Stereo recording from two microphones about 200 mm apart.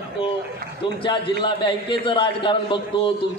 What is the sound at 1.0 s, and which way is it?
A man's voice, 25° left (ahead or behind).